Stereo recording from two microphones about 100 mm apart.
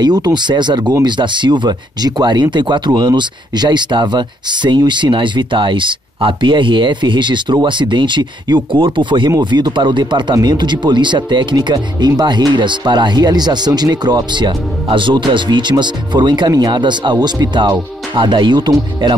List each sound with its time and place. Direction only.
0.0 s speech: 45° right (ahead or behind)